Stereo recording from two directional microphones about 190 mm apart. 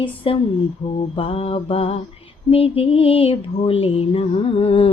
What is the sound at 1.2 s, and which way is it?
Mantra, 30° left (ahead or behind).